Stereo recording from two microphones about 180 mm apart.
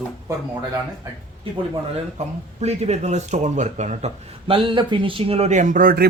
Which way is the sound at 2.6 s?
40° right (ahead or behind).